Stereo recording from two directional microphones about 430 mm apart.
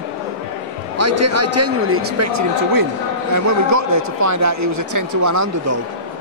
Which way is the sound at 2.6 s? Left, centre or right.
Right.